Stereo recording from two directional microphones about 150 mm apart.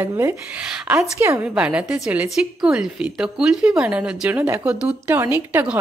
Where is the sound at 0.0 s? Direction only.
20° right (ahead or behind).